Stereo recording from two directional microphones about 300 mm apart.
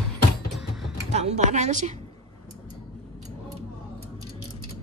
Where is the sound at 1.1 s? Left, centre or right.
Right.